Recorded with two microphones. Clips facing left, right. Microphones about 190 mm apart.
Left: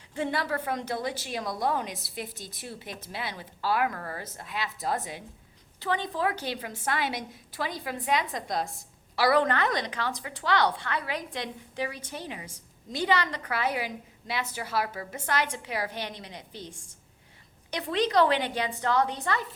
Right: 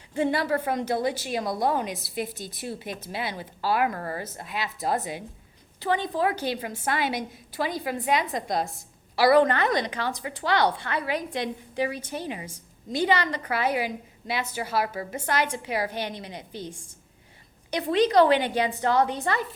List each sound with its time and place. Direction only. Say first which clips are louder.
0.2 s a woman's voice: right 5 dB; 5° right (ahead or behind)
17.9 s a woman's voice: right 5 dB; 5° right (ahead or behind)